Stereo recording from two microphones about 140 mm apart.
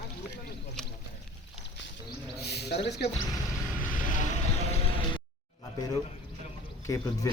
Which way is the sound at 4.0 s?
65° left (ahead or behind).